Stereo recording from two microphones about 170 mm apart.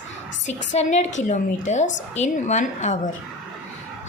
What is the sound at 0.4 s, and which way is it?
A woman's voice, 45° left (ahead or behind).